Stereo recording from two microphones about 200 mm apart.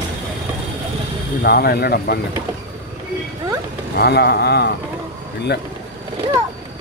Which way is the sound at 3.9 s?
55° left (ahead or behind).